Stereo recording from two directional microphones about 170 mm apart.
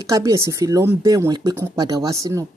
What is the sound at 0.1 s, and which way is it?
Speech, 20° right (ahead or behind).